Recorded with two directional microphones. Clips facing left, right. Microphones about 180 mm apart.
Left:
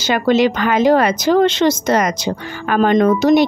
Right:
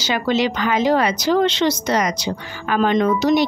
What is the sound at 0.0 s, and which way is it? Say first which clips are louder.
A woman's voice: left 5 dB; 50° left (ahead or behind).